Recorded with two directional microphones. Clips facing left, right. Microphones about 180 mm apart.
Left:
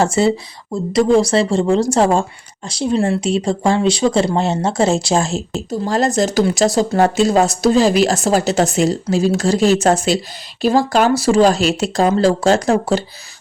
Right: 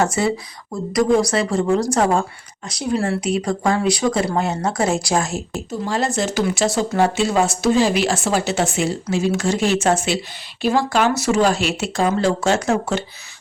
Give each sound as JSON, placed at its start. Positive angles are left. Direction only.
{"t": 0.0, "sound": "speech", "side_deg": 25}
{"t": 5.8, "sound": "speech", "side_deg": 40}